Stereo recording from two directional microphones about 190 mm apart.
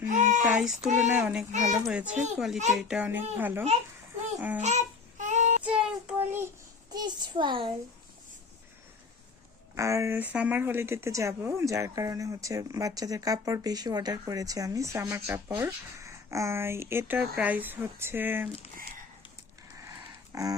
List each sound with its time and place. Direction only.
0.0 s child singing: 40° right (ahead or behind)
0.9 s a child's voice: 5° right (ahead or behind)
1.5 s speech: 40° right (ahead or behind)
1.9 s speech: 5° right (ahead or behind)
2.1 s speech: 35° right (ahead or behind)
2.7 s a child's voice: 5° right (ahead or behind)
4.6 s child singing: 35° right (ahead or behind)
5.6 s child singing: 5° right (ahead or behind)
6.9 s a sound: 20° right (ahead or behind)
9.7 s speech: 15° right (ahead or behind)
19.8 s a sound: 15° right (ahead or behind)